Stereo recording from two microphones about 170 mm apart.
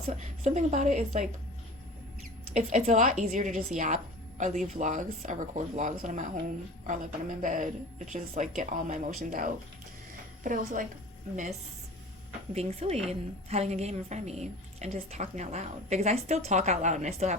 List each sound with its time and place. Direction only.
0.4 s a woman's voice: 45° right (ahead or behind)
2.5 s a woman's voice: 45° right (ahead or behind)
12.5 s a woman's voice: 40° right (ahead or behind)